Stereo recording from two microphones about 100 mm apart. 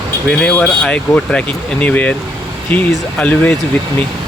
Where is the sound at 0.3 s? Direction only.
10° left (ahead or behind).